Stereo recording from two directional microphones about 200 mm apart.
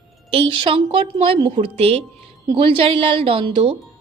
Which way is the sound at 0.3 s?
25° right (ahead or behind).